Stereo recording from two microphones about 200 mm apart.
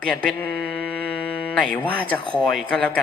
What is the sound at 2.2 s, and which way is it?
Speech, 25° left (ahead or behind).